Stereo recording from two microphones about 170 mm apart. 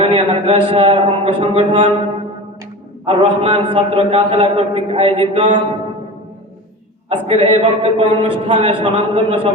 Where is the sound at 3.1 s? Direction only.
30° right (ahead or behind).